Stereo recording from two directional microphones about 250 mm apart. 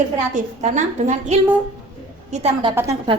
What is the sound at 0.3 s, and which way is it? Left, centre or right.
A woman's voice, right.